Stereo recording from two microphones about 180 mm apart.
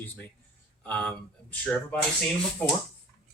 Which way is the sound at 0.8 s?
5° left (ahead or behind).